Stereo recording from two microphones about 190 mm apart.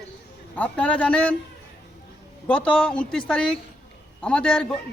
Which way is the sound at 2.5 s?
5° left (ahead or behind).